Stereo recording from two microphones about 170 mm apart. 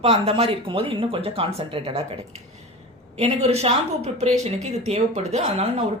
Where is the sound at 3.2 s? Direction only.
40° right (ahead or behind).